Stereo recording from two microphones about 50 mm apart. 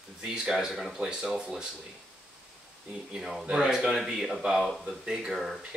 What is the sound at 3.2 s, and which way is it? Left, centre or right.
Speech, centre.